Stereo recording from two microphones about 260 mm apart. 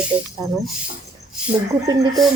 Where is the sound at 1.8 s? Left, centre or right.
Centre.